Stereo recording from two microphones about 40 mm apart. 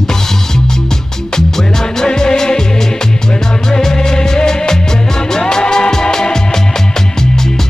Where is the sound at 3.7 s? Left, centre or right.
Centre.